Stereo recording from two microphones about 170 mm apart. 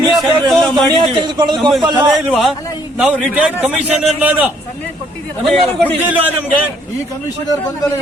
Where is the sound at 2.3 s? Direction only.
Centre (ahead or behind).